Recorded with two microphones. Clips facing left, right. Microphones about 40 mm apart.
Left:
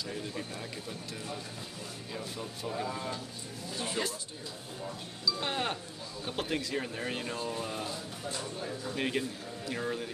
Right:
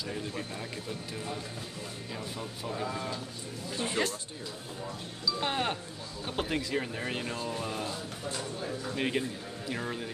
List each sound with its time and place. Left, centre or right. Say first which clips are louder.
2.1 s speech: left 1 dB; centre
3.7 s speech: right 3 dB; right
5.4 s music: right 4 dB; centre
6.2 s speech: right 2 dB; centre
8.9 s speech: right 1 dB; centre